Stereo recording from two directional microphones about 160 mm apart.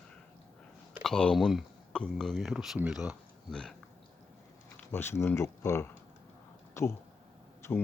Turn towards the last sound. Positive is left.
turn(degrees=15)  # may be behind; listen again after turning